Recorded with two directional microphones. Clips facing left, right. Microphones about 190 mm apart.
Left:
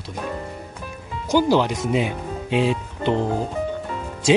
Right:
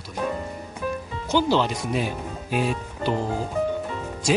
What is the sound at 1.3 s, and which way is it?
Speech, 15° left (ahead or behind).